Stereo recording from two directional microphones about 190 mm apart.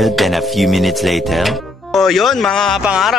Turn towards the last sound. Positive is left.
turn(degrees=-5)  # may be behind; listen again after turning